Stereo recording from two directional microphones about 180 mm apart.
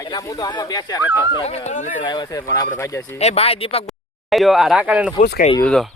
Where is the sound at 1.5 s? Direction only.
40° left (ahead or behind).